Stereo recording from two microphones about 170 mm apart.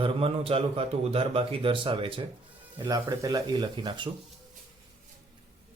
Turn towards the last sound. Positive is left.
turn(degrees=-30)  # may be behind; listen again after turning